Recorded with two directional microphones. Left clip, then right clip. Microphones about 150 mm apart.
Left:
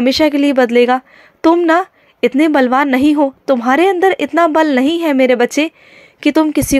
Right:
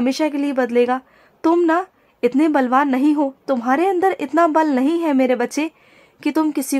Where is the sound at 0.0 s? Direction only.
20° left (ahead or behind).